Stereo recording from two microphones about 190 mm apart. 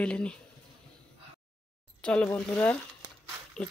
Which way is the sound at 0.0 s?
5° left (ahead or behind).